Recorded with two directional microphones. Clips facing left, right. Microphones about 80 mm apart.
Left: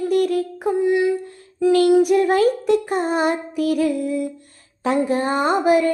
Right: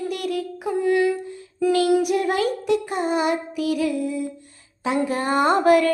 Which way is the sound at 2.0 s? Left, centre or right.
Left.